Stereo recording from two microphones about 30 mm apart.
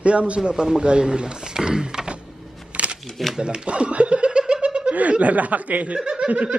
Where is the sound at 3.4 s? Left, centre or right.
Right.